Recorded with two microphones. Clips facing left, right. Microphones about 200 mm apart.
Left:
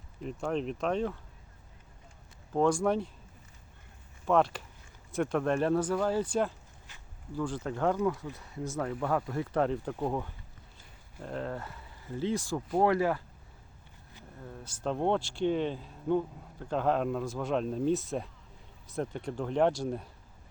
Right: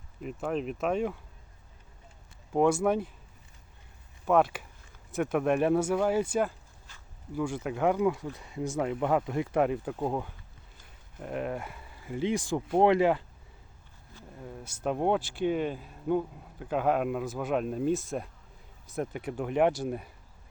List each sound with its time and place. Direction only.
0.2 s speech: 5° right (ahead or behind)
2.5 s speech: 10° right (ahead or behind)
4.3 s speech: 5° right (ahead or behind)
14.4 s speech: 15° right (ahead or behind)